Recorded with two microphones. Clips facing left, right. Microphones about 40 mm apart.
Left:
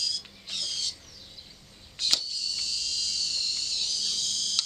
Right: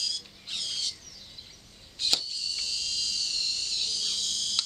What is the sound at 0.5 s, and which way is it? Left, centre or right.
Squawk, right.